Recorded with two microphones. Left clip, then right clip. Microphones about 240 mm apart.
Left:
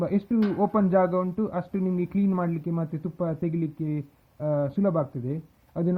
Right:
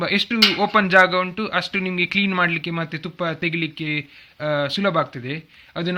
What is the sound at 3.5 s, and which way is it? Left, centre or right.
Speech, right.